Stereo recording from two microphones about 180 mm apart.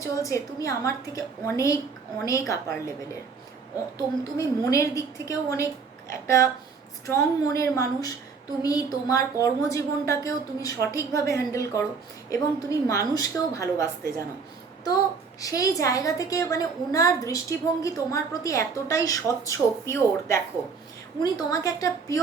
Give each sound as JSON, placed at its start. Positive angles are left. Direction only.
{"t": 0.0, "sound": "a woman's voice", "side_deg": 15}
{"t": 3.9, "sound": "a woman's voice", "side_deg": 20}
{"t": 12.9, "sound": "a woman's voice", "side_deg": 20}
{"t": 15.4, "sound": "a woman's voice", "side_deg": 20}